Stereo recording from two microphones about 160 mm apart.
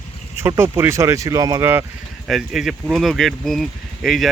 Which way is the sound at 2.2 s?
Centre (ahead or behind).